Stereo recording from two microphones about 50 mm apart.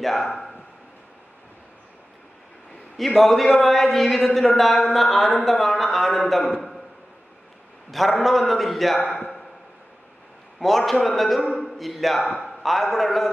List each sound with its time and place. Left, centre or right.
0.0 s a man's voice: centre
3.0 s a man's voice: centre
7.9 s a man's voice: centre
9.0 s a man's voice: centre
10.9 s a man's voice: centre
11.5 s a sound: centre
12.4 s a man's voice: centre